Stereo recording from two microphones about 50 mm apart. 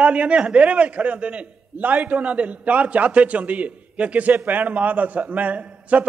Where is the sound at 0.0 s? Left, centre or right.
Right.